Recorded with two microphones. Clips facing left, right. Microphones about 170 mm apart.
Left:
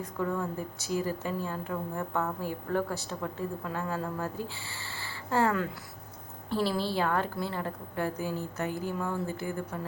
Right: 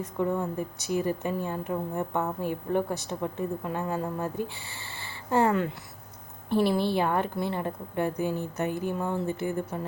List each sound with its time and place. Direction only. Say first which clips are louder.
0.0 s speech: right 4 dB; 20° right (ahead or behind)